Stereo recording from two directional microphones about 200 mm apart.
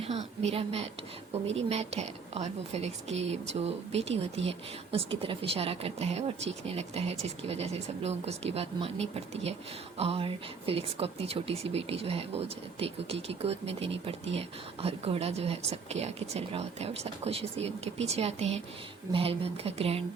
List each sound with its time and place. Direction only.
0.0 s a woman's voice: 30° right (ahead or behind)